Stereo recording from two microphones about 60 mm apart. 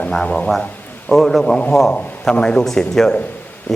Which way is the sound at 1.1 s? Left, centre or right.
Centre.